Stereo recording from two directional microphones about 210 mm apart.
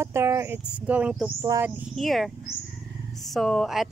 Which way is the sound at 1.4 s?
15° right (ahead or behind).